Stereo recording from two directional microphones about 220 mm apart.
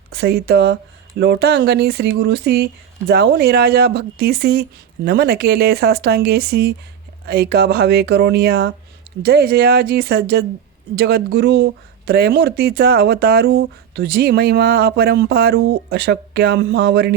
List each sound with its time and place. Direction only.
0.1 s speech: 50° right (ahead or behind)